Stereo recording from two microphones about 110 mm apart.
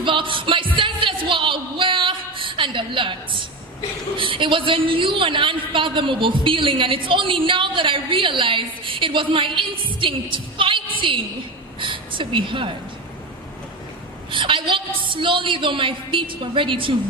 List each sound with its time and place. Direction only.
0.0 s a woman's voice: 50° right (ahead or behind)
14.3 s a woman's voice: 50° right (ahead or behind)